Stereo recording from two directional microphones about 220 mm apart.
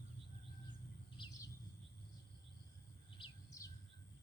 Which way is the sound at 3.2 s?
15° left (ahead or behind).